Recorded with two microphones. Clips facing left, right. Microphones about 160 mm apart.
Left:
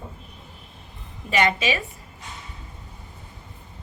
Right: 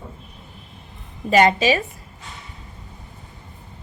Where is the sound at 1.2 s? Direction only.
40° right (ahead or behind).